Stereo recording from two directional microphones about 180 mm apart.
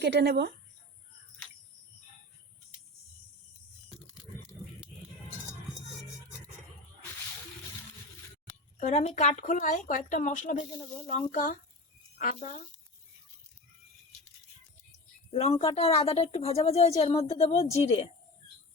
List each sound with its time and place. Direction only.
0.0 s speech: 70° right (ahead or behind)
8.8 s speech: 40° left (ahead or behind)
15.3 s speech: 35° left (ahead or behind)